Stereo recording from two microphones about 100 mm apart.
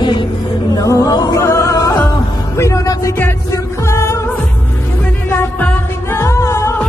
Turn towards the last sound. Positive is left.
turn(degrees=25)  # may be behind; listen again after turning